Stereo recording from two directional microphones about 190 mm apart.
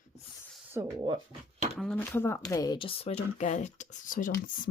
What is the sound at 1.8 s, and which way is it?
Speech, 5° left (ahead or behind).